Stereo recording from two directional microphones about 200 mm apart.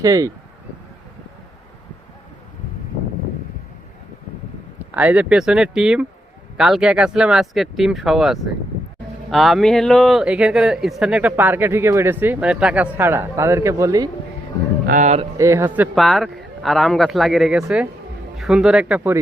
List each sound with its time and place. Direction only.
0.0 s a man's voice: 15° right (ahead or behind)
4.9 s a man's voice: 5° right (ahead or behind)
14.8 s a man's voice: 35° right (ahead or behind)
15.4 s speech: 15° right (ahead or behind)